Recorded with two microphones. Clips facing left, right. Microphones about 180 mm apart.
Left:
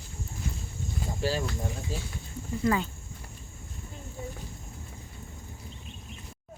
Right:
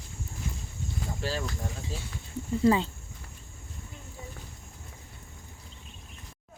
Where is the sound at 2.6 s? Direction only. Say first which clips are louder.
Right 4 dB; 25° right (ahead or behind).